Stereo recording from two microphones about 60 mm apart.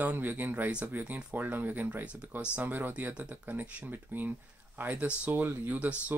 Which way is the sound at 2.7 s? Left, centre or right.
Right.